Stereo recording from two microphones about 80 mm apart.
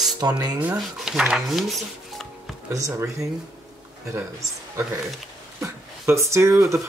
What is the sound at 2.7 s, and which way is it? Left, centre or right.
Speech, right.